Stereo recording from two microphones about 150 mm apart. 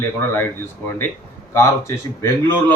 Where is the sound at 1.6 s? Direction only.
20° left (ahead or behind).